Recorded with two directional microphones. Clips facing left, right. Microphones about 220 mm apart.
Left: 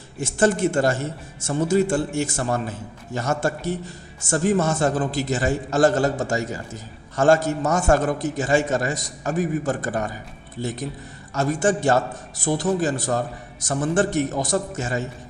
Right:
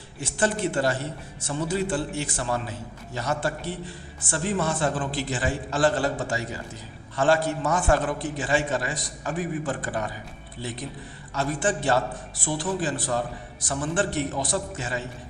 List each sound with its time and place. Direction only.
0.2 s a man's voice: 45° left (ahead or behind)